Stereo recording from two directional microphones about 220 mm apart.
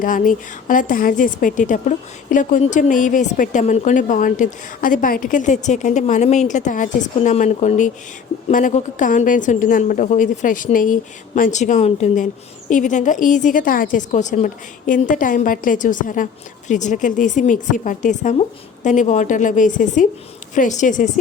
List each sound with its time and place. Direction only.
0.0 s a woman's voice: 35° left (ahead or behind)